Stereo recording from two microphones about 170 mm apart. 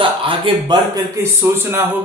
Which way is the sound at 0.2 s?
30° right (ahead or behind).